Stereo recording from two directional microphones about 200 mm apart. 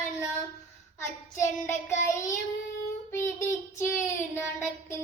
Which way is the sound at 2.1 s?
15° left (ahead or behind).